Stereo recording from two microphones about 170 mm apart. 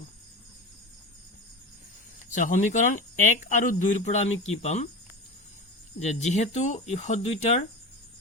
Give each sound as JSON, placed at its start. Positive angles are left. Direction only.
{"t": 2.3, "sound": "speech", "side_deg": 50}
{"t": 6.0, "sound": "speech", "side_deg": 40}